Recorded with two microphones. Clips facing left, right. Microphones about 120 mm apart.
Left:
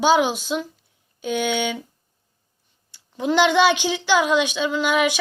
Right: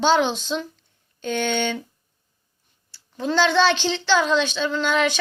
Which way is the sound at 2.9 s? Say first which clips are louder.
Left 2 dB; 15° left (ahead or behind).